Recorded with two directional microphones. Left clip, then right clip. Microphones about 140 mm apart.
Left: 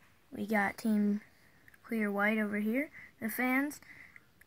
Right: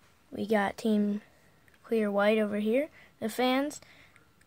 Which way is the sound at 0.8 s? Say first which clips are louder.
Right 5 dB; 30° right (ahead or behind).